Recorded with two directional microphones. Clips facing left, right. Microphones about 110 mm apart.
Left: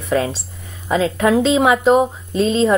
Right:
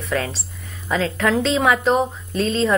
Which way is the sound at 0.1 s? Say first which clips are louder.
Left 6 dB; 20° left (ahead or behind).